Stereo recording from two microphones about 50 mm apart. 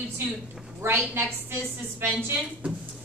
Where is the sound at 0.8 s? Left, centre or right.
Right.